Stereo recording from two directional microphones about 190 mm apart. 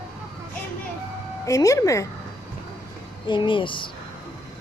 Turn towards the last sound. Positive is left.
turn(degrees=25)  # may be behind; listen again after turning